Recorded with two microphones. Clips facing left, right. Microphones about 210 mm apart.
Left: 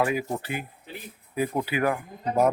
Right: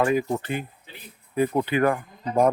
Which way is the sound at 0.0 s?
10° left (ahead or behind).